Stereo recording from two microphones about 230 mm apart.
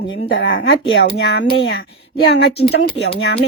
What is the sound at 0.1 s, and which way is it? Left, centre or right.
Speech, left.